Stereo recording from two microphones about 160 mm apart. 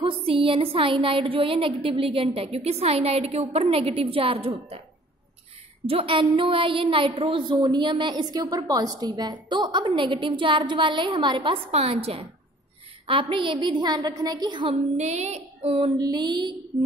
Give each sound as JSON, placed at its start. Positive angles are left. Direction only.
{"t": 0.0, "sound": "a woman's voice", "side_deg": -35}
{"t": 5.9, "sound": "a woman's voice", "side_deg": -35}
{"t": 16.0, "sound": "a woman's voice", "side_deg": -25}